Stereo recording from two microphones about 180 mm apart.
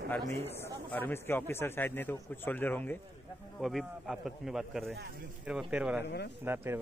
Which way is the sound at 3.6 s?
Centre (ahead or behind).